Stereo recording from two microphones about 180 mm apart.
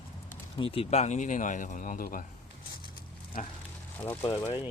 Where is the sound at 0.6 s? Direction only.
30° left (ahead or behind); by 2.2 s 50° left (ahead or behind).